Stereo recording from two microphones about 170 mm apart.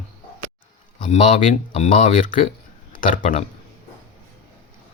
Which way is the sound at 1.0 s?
45° left (ahead or behind).